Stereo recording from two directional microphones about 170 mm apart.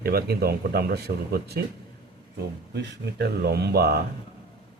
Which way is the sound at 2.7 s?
70° right (ahead or behind).